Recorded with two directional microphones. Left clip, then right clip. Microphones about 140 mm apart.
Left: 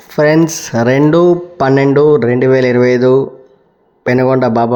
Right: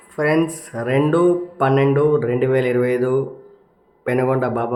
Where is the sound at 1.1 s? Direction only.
55° left (ahead or behind).